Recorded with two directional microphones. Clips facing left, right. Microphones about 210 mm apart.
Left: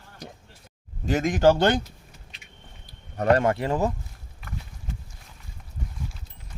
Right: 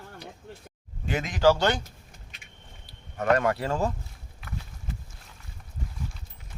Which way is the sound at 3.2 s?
30° left (ahead or behind).